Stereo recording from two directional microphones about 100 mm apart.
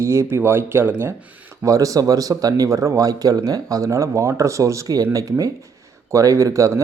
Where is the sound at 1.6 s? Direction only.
35° right (ahead or behind).